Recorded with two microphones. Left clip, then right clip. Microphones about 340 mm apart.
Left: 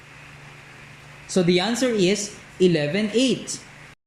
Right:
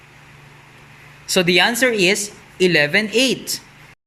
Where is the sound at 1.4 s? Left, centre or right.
Right.